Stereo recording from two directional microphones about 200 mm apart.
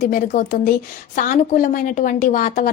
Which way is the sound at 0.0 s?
45° left (ahead or behind).